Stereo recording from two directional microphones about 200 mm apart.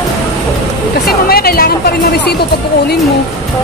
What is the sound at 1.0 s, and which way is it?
Speech, 50° left (ahead or behind).